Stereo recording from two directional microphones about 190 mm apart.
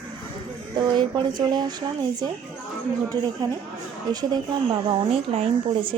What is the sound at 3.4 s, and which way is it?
Speech, 20° right (ahead or behind).